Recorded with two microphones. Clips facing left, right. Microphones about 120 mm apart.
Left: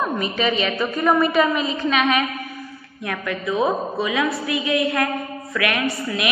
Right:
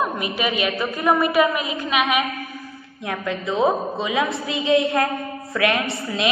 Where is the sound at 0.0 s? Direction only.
10° right (ahead or behind).